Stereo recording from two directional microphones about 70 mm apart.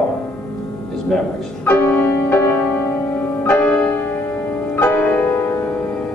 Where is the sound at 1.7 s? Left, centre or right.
Left.